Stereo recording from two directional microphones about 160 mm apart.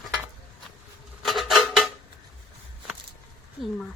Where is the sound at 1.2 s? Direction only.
Centre (ahead or behind).